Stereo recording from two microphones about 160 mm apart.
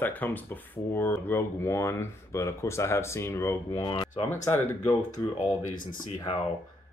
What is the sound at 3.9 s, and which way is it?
Speech, 30° left (ahead or behind).